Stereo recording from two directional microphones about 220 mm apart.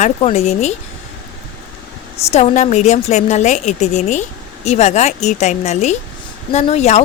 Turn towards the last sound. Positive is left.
turn(degrees=30)  # may be behind; listen again after turning